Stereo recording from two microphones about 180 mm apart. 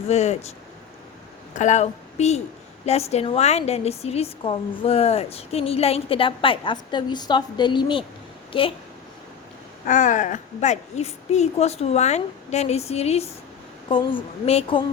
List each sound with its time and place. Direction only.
0.1 s a woman's voice: 35° left (ahead or behind)
1.5 s a woman's voice: 40° left (ahead or behind)
9.8 s a woman's voice: 45° left (ahead or behind)